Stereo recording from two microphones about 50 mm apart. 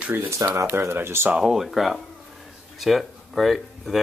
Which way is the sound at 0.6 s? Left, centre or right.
Right.